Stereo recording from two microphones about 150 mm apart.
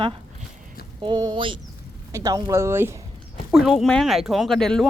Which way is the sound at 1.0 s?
30° right (ahead or behind).